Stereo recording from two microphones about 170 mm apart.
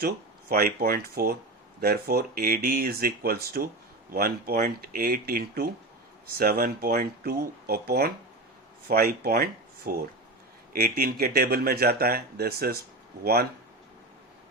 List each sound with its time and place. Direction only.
0.0 s speech: 65° right (ahead or behind)